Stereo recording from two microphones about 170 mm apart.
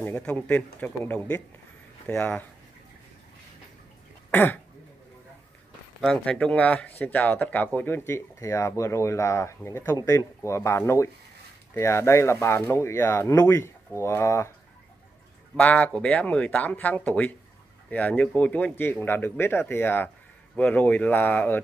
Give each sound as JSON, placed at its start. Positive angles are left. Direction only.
{"t": 0.0, "sound": "speech", "side_deg": 10}
{"t": 4.3, "sound": "speech", "side_deg": 10}
{"t": 5.9, "sound": "speech", "side_deg": 5}
{"t": 15.5, "sound": "speech", "side_deg": 5}